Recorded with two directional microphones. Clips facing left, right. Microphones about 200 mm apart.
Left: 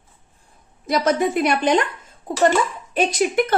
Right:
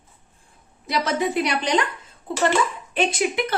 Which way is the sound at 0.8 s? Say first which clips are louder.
Left 4 dB; 45° left (ahead or behind).